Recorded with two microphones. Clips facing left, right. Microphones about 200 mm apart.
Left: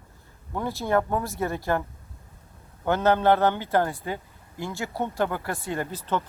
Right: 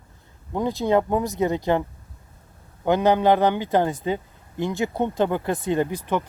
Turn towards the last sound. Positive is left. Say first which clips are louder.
# right 6 dB
turn(degrees=-15)  # may be behind; listen again after turning